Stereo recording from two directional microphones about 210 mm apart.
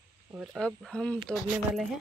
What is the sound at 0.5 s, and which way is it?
Speech, 5° left (ahead or behind).